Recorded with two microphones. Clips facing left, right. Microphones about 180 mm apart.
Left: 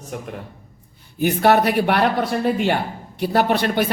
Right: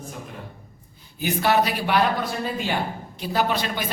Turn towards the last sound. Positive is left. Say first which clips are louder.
# left 6 dB
turn(degrees=60)  # may be behind; listen again after turning